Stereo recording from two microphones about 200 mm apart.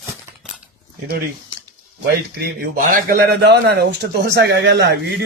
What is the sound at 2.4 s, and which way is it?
A man's voice, 50° right (ahead or behind).